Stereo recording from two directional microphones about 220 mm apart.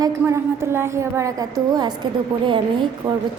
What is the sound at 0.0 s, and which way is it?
A woman's voice, 10° right (ahead or behind).